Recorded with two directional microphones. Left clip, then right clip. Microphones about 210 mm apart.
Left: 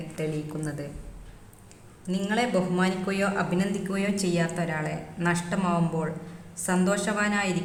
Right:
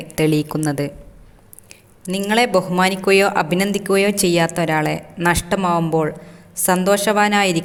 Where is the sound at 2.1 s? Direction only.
45° right (ahead or behind).